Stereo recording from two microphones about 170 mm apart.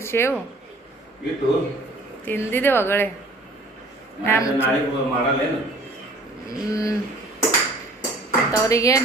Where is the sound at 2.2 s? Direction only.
10° left (ahead or behind).